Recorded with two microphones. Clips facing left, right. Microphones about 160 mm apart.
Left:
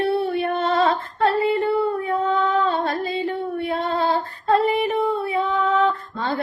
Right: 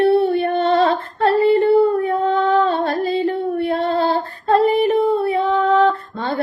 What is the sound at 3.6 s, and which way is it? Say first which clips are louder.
Female singing: right 3 dB; 35° right (ahead or behind).